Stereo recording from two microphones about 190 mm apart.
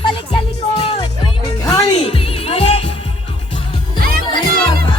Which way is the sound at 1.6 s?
25° left (ahead or behind).